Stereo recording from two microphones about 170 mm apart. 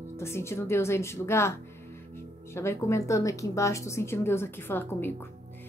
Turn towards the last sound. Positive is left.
turn(degrees=15)  # may be behind; listen again after turning